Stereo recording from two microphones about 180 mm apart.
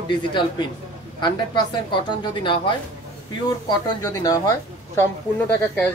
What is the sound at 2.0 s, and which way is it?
Speech, 25° left (ahead or behind).